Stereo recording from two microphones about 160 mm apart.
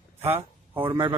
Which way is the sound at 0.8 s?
30° right (ahead or behind).